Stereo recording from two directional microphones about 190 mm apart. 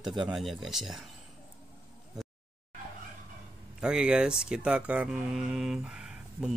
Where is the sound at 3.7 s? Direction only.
5° right (ahead or behind).